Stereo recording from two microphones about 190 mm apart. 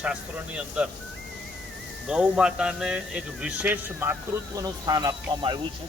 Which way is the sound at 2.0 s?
5° right (ahead or behind).